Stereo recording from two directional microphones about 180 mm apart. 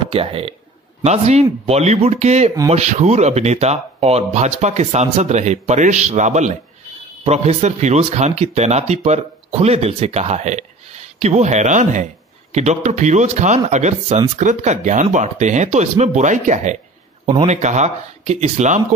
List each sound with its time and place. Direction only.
0.1 s speech: 30° right (ahead or behind)